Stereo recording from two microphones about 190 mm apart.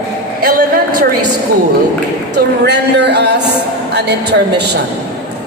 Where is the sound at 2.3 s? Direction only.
60° right (ahead or behind).